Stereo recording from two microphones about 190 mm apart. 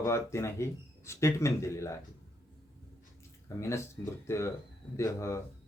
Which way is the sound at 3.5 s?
15° left (ahead or behind).